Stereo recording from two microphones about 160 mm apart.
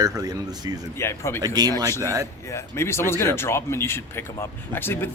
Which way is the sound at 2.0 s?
20° right (ahead or behind).